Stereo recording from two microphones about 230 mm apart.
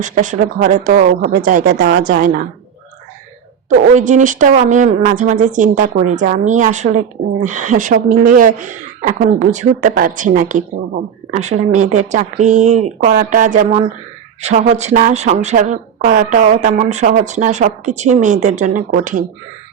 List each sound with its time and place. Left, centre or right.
0.0 s speech: right
3.7 s speech: right